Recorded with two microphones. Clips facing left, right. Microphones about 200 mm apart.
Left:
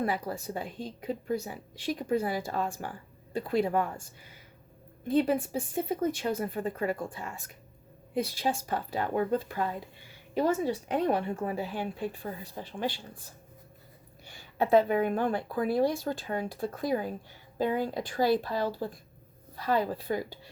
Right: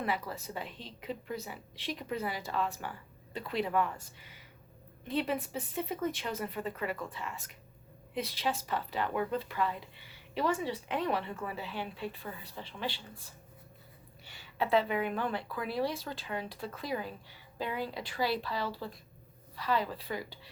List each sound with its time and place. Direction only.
0.0 s a woman's voice: 45° left (ahead or behind)
5.0 s a woman's voice: 45° left (ahead or behind)